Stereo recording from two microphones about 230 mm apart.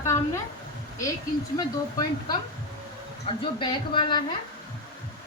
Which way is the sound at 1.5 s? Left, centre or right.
Centre.